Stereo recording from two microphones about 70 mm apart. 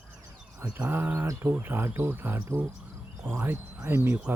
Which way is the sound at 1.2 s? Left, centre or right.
Right.